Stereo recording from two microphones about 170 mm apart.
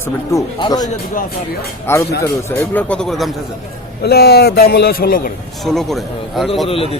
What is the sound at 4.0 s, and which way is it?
A man's voice, 70° left (ahead or behind).